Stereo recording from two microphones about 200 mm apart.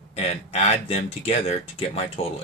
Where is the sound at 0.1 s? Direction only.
30° left (ahead or behind).